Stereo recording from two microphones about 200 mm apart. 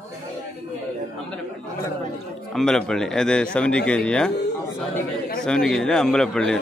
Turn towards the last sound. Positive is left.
turn(degrees=5)  # may be behind; listen again after turning